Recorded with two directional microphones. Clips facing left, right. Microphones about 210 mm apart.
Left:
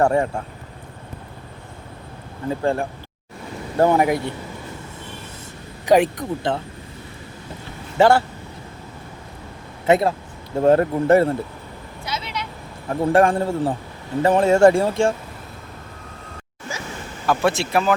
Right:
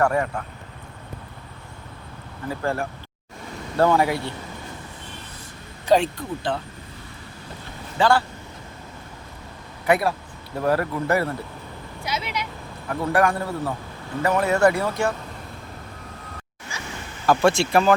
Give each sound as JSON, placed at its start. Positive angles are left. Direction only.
{"t": 0.0, "sound": "speech", "side_deg": 25}
{"t": 2.5, "sound": "speech", "side_deg": 15}
{"t": 5.8, "sound": "speech", "side_deg": 15}
{"t": 7.9, "sound": "speech", "side_deg": 25}
{"t": 9.8, "sound": "speech", "side_deg": 25}
{"t": 12.0, "sound": "speech", "side_deg": -10}
{"t": 12.9, "sound": "speech", "side_deg": 25}
{"t": 17.2, "sound": "speech", "side_deg": 0}